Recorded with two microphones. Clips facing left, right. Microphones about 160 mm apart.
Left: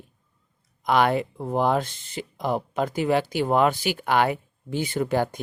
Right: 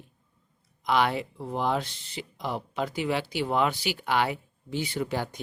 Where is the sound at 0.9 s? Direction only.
50° left (ahead or behind).